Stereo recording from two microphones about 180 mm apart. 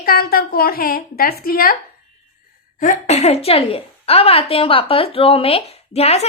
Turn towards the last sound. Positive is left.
turn(degrees=35)  # may be behind; listen again after turning